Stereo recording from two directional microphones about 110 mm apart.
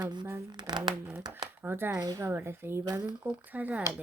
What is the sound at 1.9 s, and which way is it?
Speech, 35° right (ahead or behind).